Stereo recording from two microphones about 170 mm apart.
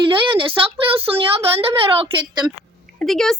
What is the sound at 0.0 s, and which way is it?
Speech, 30° right (ahead or behind).